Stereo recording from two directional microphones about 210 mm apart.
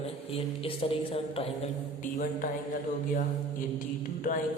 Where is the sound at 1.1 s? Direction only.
25° left (ahead or behind).